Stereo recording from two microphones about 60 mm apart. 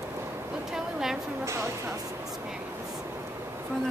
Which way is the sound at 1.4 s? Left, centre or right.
Right.